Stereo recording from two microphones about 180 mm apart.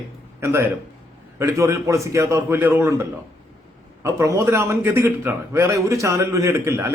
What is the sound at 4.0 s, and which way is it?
A man's voice, 15° right (ahead or behind).